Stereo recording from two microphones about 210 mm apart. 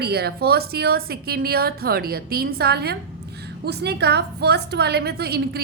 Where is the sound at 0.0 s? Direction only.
50° right (ahead or behind).